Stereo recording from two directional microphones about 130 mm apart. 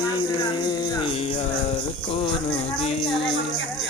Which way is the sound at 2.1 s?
40° left (ahead or behind).